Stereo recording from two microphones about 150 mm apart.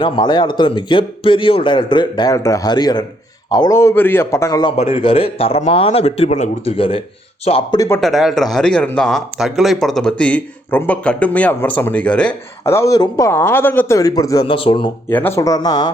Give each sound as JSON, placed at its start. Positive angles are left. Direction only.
{"t": 0.0, "sound": "a man's voice", "side_deg": 30}
{"t": 4.8, "sound": "a man's voice", "side_deg": 40}
{"t": 6.7, "sound": "a man's voice", "side_deg": 35}
{"t": 8.0, "sound": "speech", "side_deg": 0}
{"t": 14.4, "sound": "a man's voice", "side_deg": 35}
{"t": 15.1, "sound": "a man's voice", "side_deg": 15}